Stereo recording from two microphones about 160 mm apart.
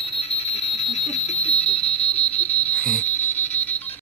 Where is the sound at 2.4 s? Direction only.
10° left (ahead or behind).